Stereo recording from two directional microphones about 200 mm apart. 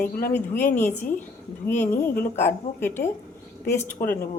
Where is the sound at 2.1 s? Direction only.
45° left (ahead or behind).